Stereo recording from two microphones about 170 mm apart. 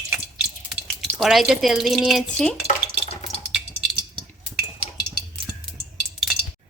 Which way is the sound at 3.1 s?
40° left (ahead or behind).